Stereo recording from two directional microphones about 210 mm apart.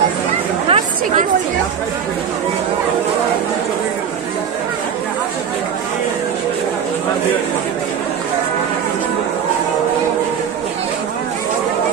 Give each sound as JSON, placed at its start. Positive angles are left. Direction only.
{"t": 0.7, "sound": "chatter", "side_deg": -35}